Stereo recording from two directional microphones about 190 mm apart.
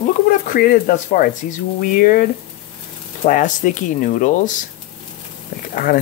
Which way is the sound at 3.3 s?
40° left (ahead or behind).